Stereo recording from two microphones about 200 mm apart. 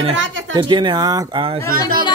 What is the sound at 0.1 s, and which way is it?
Speech, 70° right (ahead or behind).